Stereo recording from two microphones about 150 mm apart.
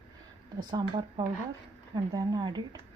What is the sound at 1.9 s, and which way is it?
Speech, 25° right (ahead or behind).